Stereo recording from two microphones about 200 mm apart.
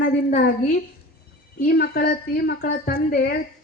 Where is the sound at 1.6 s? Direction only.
50° left (ahead or behind).